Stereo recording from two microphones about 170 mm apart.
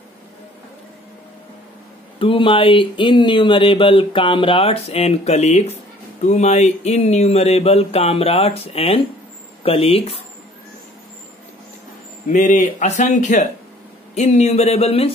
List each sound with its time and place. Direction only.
2.1 s speech: 30° left (ahead or behind)
12.3 s speech: 45° left (ahead or behind)